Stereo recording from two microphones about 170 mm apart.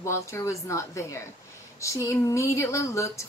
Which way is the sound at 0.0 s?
15° left (ahead or behind).